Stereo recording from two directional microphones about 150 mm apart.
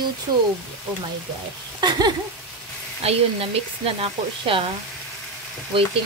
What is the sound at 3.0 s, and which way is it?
Speech, 40° right (ahead or behind).